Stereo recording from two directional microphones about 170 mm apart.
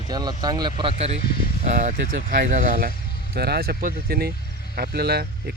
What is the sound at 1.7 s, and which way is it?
Speech, 50° right (ahead or behind).